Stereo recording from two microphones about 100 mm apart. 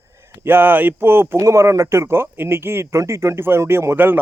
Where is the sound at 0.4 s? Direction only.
20° right (ahead or behind).